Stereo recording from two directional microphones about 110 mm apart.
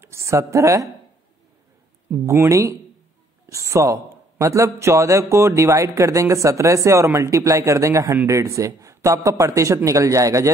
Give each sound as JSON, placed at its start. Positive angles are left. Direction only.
{"t": 0.0, "sound": "a woman's voice", "side_deg": -25}
{"t": 2.0, "sound": "speech", "side_deg": -25}